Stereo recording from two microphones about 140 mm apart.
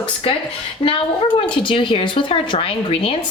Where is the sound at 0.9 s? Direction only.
35° left (ahead or behind).